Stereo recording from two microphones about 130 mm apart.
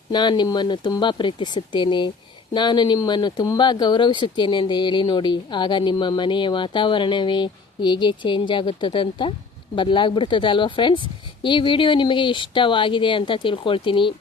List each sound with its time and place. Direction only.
0.1 s speech: 35° left (ahead or behind)